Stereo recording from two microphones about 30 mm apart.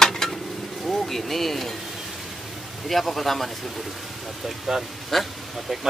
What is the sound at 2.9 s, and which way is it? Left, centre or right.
Speech, centre.